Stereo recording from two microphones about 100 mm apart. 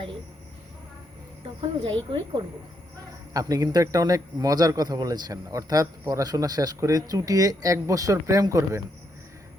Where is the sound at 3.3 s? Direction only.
35° right (ahead or behind).